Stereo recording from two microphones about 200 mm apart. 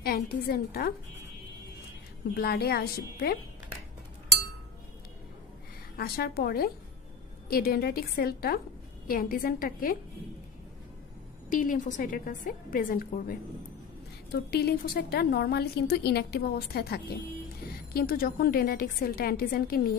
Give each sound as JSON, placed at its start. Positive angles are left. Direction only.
{"t": 0.0, "sound": "a woman's voice", "side_deg": 50}
{"t": 2.3, "sound": "a woman's voice", "side_deg": 50}
{"t": 5.9, "sound": "a woman's voice", "side_deg": 50}
{"t": 11.5, "sound": "a woman's voice", "side_deg": 40}
{"t": 14.5, "sound": "a woman's voice", "side_deg": 50}